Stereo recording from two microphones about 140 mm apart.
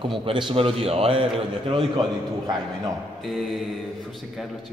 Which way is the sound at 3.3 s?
Centre (ahead or behind).